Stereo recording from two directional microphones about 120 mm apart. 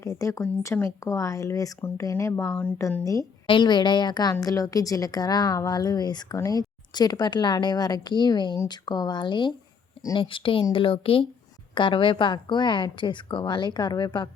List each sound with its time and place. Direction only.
0.0 s speech: 25° left (ahead or behind)
2.5 s speech: 10° left (ahead or behind)
3.0 s speech: 25° left (ahead or behind)
3.4 s a woman's voice: 40° left (ahead or behind)